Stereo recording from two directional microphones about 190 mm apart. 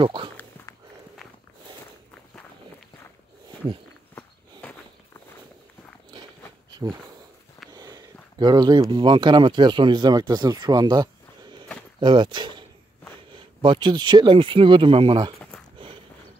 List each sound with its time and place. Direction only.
0.0 s speech: 25° right (ahead or behind)
0.7 s walk: 15° left (ahead or behind)
4.1 s walk: 5° left (ahead or behind)
7.7 s speech: 20° right (ahead or behind)